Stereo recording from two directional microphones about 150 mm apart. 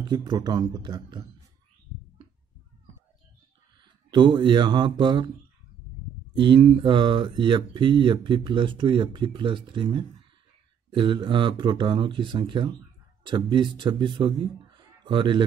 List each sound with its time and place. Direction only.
0.1 s speech: 30° right (ahead or behind)
4.1 s speech: 30° right (ahead or behind)
6.3 s a man's voice: 30° right (ahead or behind)